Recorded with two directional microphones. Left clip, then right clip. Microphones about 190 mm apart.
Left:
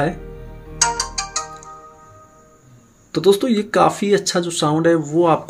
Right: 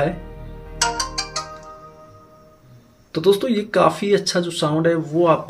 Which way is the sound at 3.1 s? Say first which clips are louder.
Left 2 dB; 25° left (ahead or behind).